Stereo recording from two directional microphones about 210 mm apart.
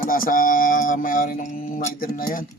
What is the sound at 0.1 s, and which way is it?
A man's voice, 40° left (ahead or behind).